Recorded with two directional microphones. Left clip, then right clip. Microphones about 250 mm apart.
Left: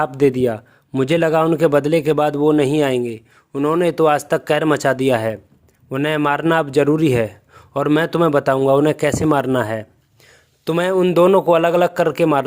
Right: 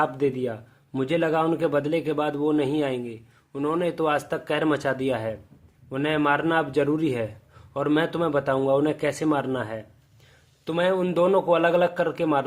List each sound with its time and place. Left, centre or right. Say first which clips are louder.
0.0 s a man's voice: left 8 dB; left